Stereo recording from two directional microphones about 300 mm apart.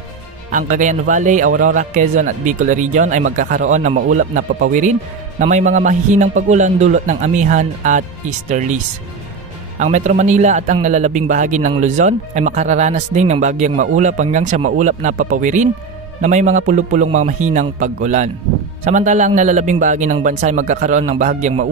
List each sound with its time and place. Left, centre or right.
0.5 s a man's voice: right
9.8 s a man's voice: right